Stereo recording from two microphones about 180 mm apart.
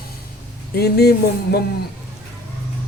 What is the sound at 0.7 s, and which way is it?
Speech, 60° left (ahead or behind).